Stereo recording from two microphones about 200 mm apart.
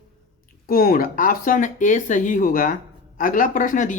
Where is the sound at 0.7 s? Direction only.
45° left (ahead or behind).